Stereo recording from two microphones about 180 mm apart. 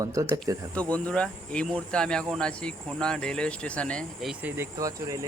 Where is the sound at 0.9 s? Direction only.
5° left (ahead or behind).